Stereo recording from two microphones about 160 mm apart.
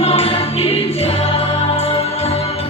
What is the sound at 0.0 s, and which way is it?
Music, 40° left (ahead or behind).